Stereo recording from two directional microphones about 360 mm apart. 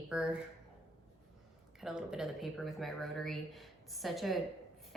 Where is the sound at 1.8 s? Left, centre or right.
Centre.